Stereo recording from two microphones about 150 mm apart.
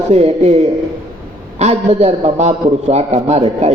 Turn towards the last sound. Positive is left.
turn(degrees=-45)  # may be behind; listen again after turning